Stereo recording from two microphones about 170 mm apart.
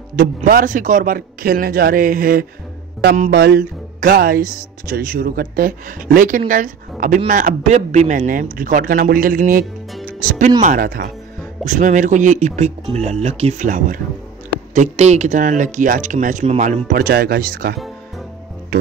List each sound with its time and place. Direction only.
0.1 s speech: 60° right (ahead or behind)
3.2 s speech: 70° right (ahead or behind)
11.6 s speech: 45° right (ahead or behind)